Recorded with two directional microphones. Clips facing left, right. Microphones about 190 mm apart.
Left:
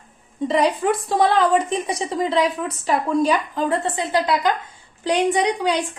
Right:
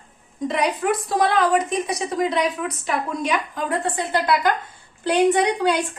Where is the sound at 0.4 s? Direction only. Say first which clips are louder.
Left 3 dB; 30° left (ahead or behind).